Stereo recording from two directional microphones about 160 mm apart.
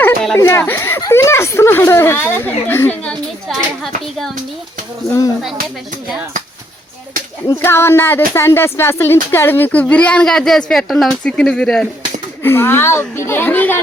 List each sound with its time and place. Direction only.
0.0 s a sound: 5° left (ahead or behind)
0.3 s speech: 15° left (ahead or behind)
7.6 s speech: 15° left (ahead or behind)